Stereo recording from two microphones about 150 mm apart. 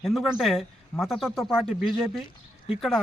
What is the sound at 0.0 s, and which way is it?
Speech, centre (ahead or behind).